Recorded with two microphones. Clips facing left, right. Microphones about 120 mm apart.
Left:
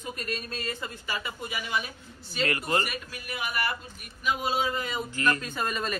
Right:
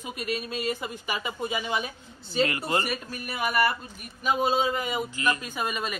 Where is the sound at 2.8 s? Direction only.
40° right (ahead or behind).